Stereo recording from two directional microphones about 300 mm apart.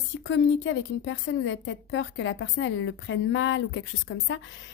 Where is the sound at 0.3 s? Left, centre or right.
Left.